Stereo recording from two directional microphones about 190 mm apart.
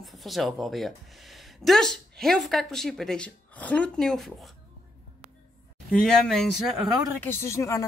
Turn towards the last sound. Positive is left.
turn(degrees=15)  # may be behind; listen again after turning